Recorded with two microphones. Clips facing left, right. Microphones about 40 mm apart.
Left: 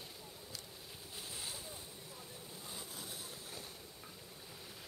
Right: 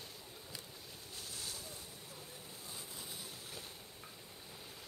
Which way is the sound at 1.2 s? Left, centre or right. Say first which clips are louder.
Left 1 dB; left.